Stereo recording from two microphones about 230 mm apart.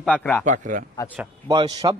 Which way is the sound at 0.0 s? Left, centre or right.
Centre.